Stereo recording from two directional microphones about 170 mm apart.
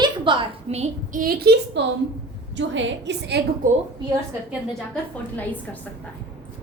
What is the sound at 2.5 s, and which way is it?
Speech, 90° right.